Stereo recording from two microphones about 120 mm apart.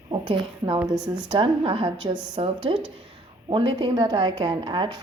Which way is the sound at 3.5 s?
45° right (ahead or behind).